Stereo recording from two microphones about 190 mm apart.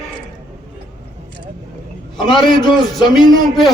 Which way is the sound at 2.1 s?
25° left (ahead or behind).